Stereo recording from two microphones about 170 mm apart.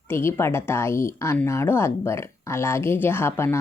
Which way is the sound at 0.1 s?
15° left (ahead or behind).